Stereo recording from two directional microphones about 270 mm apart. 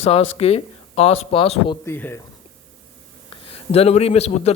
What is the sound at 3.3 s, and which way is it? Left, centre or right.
Speech, left.